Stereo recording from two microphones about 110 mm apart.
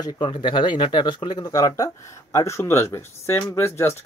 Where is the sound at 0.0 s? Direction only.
50° left (ahead or behind).